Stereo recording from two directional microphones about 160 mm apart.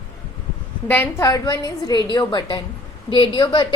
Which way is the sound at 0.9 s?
15° left (ahead or behind).